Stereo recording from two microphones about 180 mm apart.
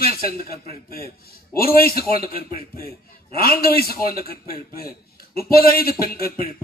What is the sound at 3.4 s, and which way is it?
A man's voice, 55° left (ahead or behind).